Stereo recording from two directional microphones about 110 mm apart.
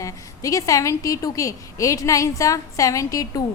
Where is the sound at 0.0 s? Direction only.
30° left (ahead or behind).